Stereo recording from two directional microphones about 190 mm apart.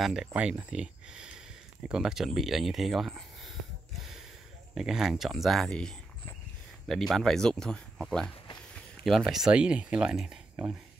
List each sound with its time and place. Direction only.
0.0 s speech: 5° right (ahead or behind)
4.7 s speech: 5° right (ahead or behind)